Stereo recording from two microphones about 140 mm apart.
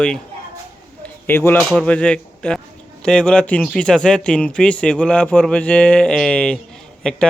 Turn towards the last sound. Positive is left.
turn(degrees=5)  # may be behind; listen again after turning